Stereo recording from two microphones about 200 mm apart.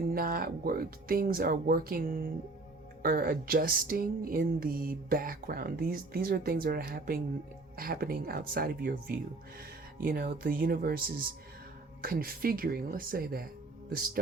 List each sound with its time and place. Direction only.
0.1 s speech: 45° right (ahead or behind)